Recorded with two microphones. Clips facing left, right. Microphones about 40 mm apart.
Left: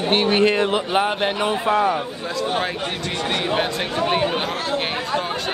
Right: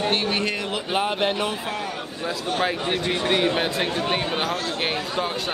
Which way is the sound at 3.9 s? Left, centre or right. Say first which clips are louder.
Left 4 dB; centre.